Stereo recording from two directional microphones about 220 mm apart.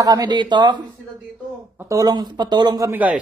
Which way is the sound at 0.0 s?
15° right (ahead or behind).